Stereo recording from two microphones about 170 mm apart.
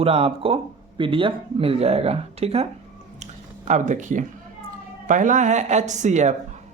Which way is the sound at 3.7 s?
45° right (ahead or behind).